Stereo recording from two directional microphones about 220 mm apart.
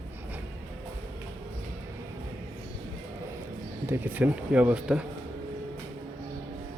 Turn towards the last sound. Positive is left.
turn(degrees=-5)  # may be behind; listen again after turning